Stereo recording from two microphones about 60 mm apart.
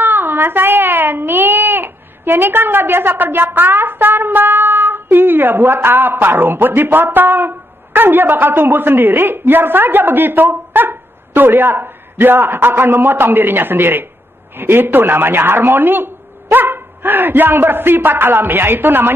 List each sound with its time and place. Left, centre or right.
0.0 s a child's voice: right